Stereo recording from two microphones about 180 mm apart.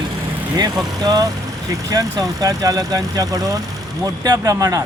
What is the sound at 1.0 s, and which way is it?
Speech, 20° right (ahead or behind).